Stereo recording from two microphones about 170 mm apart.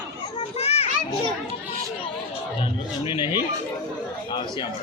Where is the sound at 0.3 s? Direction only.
35° left (ahead or behind).